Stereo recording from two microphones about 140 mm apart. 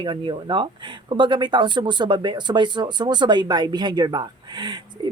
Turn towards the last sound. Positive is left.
turn(degrees=-35)  # may be behind; listen again after turning